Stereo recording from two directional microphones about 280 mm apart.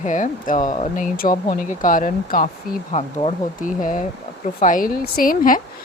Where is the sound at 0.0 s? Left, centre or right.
Left.